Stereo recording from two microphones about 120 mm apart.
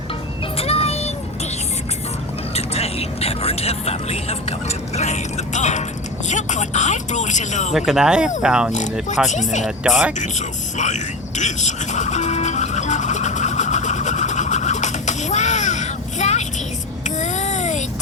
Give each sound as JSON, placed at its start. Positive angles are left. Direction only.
{"t": 0.5, "sound": "vehicle", "side_deg": 55}
{"t": 2.6, "sound": "a sound", "side_deg": 60}
{"t": 4.9, "sound": "mechanisms", "side_deg": 70}
{"t": 6.2, "sound": "speech", "side_deg": 80}
{"t": 7.7, "sound": "speech", "side_deg": -5}
{"t": 8.7, "sound": "speech", "side_deg": 85}
{"t": 9.6, "sound": "speech", "side_deg": -5}
{"t": 10.2, "sound": "a sound", "side_deg": 85}